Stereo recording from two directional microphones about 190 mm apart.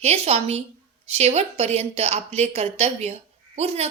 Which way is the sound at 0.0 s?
35° right (ahead or behind).